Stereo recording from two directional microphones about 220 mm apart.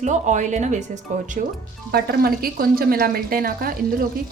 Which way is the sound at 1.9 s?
45° right (ahead or behind).